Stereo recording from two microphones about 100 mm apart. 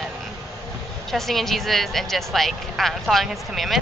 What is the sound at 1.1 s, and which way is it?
Speech, centre (ahead or behind).